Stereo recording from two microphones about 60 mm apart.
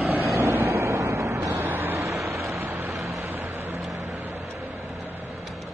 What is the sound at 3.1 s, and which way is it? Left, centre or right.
Vehicle, right.